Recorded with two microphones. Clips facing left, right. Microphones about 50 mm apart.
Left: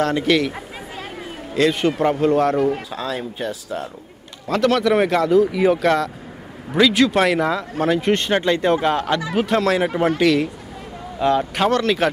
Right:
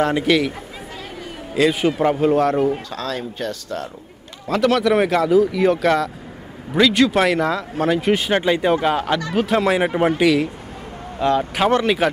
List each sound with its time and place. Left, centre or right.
0.0 s speech: centre
1.5 s speech: centre
2.9 s speech: centre
4.5 s speech: centre
9.6 s speech: centre
10.1 s speech: centre
11.7 s speech: centre